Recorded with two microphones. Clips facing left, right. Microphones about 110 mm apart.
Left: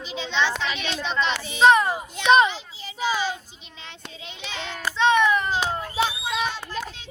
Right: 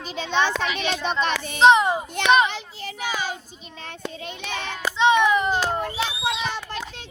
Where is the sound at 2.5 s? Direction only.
65° right (ahead or behind).